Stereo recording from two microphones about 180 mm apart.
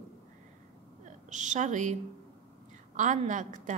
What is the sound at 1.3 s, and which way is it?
Speech, 40° right (ahead or behind).